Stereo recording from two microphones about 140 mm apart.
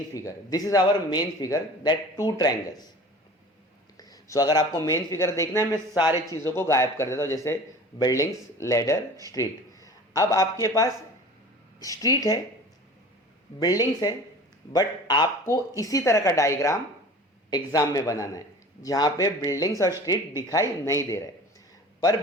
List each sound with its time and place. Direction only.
0.1 s a man's voice: 25° left (ahead or behind)
3.9 s a man's voice: 25° left (ahead or behind)
13.6 s a man's voice: 30° left (ahead or behind)